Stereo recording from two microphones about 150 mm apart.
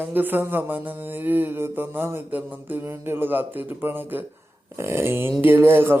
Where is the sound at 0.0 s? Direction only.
15° right (ahead or behind).